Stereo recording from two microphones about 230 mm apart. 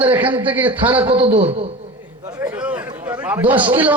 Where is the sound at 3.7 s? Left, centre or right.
Centre.